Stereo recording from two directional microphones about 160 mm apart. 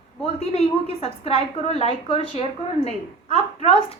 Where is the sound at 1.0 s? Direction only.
40° left (ahead or behind).